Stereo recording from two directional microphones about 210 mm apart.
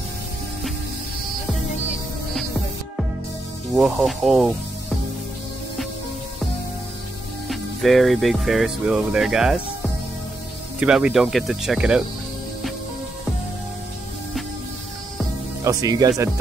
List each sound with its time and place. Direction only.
3.7 s speech: centre (ahead or behind)
7.4 s speech: centre (ahead or behind)
10.8 s speech: 5° right (ahead or behind)
15.6 s speech: 15° right (ahead or behind)